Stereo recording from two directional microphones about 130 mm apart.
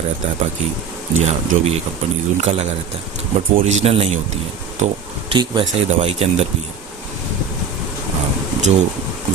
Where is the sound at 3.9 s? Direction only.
50° right (ahead or behind).